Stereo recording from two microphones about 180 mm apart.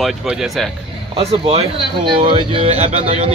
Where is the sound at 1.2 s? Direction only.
35° right (ahead or behind).